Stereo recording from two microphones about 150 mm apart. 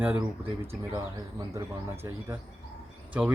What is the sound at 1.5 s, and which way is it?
Speech, 20° right (ahead or behind).